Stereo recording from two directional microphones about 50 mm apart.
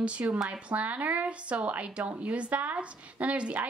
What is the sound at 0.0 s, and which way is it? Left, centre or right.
A woman's voice, right.